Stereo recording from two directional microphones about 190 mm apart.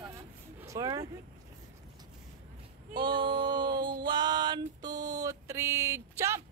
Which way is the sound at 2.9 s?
25° right (ahead or behind).